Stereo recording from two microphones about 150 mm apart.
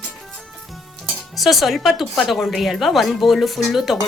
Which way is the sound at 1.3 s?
Centre (ahead or behind).